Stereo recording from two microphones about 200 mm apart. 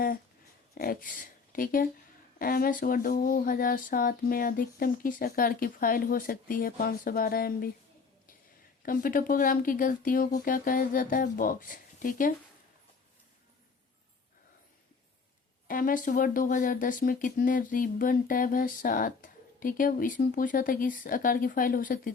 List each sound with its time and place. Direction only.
0.7 s speech: 50° left (ahead or behind)
8.8 s speech: 45° left (ahead or behind)
15.6 s speech: 45° left (ahead or behind)